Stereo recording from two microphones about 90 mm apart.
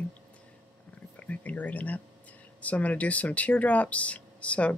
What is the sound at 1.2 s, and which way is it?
Speech, 15° left (ahead or behind).